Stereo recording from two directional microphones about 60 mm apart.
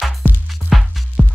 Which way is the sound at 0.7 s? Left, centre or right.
Centre.